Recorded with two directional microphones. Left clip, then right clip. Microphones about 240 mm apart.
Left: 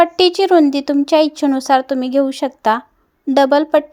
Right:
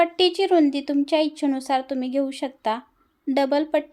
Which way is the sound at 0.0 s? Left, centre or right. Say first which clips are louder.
Left 7 dB; left.